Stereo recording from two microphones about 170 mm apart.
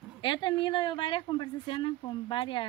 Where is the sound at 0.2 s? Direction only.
25° left (ahead or behind).